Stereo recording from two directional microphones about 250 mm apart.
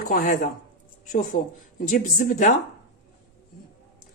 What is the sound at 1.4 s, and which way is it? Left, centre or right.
Speech, left.